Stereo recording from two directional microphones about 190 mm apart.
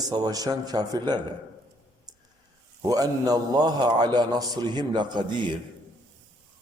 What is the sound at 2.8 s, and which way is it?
A man's voice, 20° right (ahead or behind).